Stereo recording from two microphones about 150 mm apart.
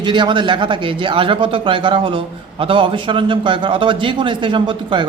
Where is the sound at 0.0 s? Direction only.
30° right (ahead or behind).